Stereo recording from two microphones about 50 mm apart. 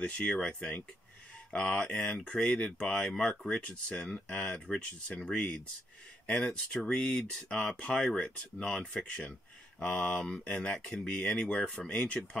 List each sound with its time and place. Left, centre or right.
0.0 s speech: centre